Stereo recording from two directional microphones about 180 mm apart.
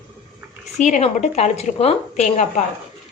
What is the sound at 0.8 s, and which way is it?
Speech, 40° left (ahead or behind).